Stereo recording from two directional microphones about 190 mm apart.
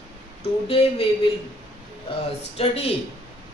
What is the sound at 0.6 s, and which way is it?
Speech, 35° left (ahead or behind).